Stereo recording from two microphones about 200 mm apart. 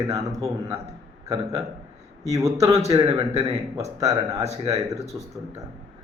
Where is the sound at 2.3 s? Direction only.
15° right (ahead or behind).